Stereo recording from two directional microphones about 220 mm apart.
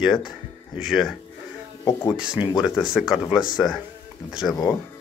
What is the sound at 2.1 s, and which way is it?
Speech, 5° right (ahead or behind).